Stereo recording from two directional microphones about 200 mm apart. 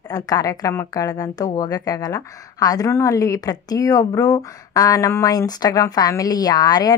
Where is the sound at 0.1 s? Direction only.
20° left (ahead or behind).